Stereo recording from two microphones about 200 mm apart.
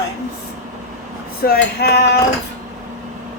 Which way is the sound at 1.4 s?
55° left (ahead or behind).